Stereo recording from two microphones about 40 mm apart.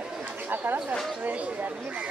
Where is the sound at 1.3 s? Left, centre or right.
Right.